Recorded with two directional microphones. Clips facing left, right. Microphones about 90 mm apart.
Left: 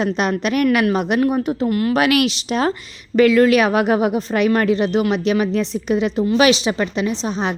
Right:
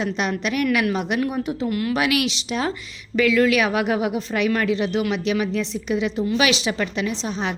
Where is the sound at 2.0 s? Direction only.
55° left (ahead or behind).